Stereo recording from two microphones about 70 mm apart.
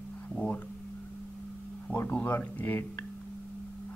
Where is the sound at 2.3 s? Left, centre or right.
Left.